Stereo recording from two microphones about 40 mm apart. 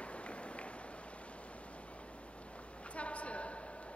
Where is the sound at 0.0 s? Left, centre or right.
Left.